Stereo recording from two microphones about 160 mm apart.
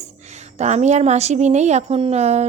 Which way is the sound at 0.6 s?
45° right (ahead or behind).